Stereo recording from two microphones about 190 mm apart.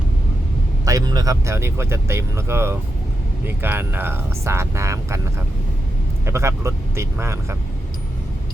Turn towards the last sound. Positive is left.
turn(degrees=-15)  # may be behind; listen again after turning